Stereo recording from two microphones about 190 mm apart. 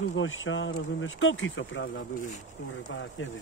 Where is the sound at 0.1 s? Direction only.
90° left.